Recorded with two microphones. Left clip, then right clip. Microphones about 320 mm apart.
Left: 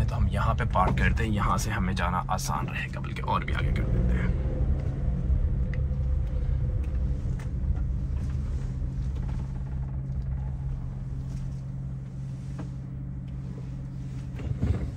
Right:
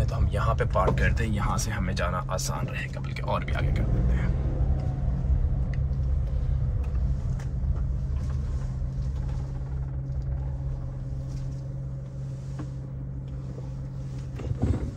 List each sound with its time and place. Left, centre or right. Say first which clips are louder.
0.0 s speech: right 1 dB; centre